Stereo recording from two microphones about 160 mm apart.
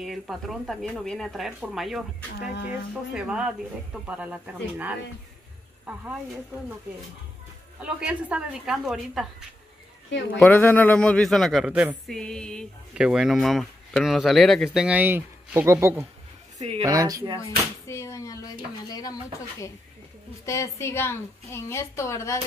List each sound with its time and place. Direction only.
0.0 s speech: centre (ahead or behind)
3.1 s speech: 5° right (ahead or behind)
7.8 s speech: 5° right (ahead or behind)
10.4 s speech: 10° left (ahead or behind); by 12.0 s 10° right (ahead or behind)
12.1 s speech: 5° left (ahead or behind); by 16.1 s 15° right (ahead or behind)
16.5 s a woman's voice: 40° right (ahead or behind)
16.8 s speech: 20° right (ahead or behind)
17.4 s a woman's voice: 20° left (ahead or behind)